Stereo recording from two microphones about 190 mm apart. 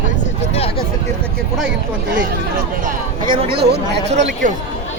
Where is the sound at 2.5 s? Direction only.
45° right (ahead or behind).